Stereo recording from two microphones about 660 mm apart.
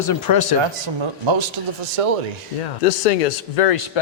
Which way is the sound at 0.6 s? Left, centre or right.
Right.